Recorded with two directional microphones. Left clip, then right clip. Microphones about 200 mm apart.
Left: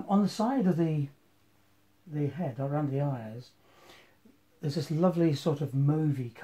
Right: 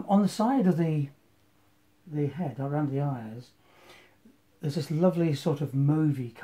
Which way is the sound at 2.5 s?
30° left (ahead or behind).